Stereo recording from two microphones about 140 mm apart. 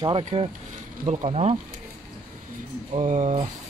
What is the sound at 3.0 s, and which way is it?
Speech, 65° right (ahead or behind).